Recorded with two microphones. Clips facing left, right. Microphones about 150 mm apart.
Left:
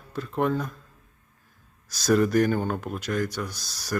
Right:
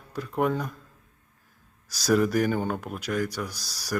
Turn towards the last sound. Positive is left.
turn(degrees=-10)  # may be behind; listen again after turning